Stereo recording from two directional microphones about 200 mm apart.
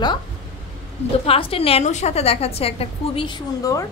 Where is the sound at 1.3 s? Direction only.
30° left (ahead or behind).